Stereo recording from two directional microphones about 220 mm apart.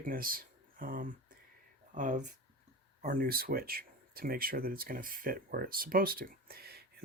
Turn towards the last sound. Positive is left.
turn(degrees=-45)  # may be behind; listen again after turning